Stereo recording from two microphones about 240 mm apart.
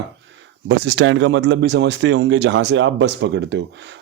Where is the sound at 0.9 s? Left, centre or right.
Right.